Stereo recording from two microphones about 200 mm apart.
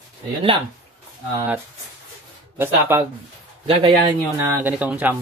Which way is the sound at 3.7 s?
25° right (ahead or behind).